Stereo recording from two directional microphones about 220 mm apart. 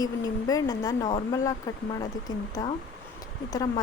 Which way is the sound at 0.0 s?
15° left (ahead or behind).